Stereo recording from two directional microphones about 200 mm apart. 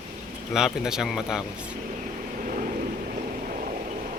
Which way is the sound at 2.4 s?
40° right (ahead or behind).